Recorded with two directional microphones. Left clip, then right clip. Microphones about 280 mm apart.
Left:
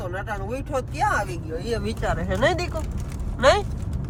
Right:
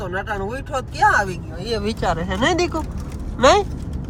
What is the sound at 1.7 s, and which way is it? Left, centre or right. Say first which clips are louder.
Speech: right 5 dB; right.